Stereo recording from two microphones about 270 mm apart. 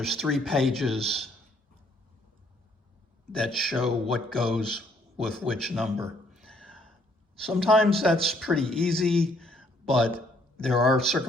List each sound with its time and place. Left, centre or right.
0.0 s a man's voice: centre
3.3 s a man's voice: centre